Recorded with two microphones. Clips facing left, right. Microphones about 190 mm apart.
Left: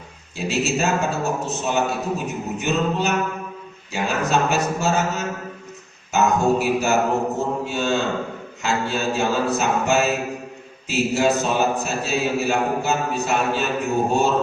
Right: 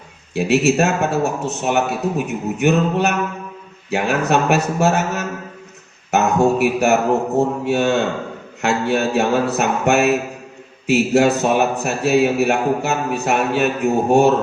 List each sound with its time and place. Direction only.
0.3 s a man's voice: 65° right (ahead or behind)